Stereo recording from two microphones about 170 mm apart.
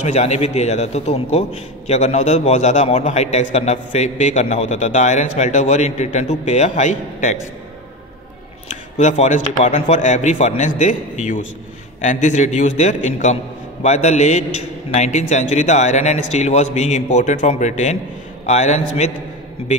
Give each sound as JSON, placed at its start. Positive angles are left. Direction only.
{"t": 0.0, "sound": "a man's voice", "side_deg": 40}
{"t": 8.6, "sound": "a man's voice", "side_deg": 45}